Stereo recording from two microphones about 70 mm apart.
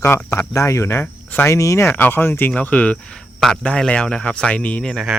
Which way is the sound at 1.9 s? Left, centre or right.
Left.